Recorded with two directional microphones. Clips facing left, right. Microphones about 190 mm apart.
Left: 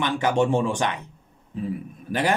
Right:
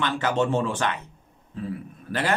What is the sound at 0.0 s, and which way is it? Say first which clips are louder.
Speech: left 2 dB; 15° left (ahead or behind).